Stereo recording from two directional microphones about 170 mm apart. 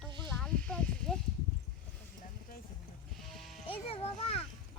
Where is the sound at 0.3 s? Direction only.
5° left (ahead or behind).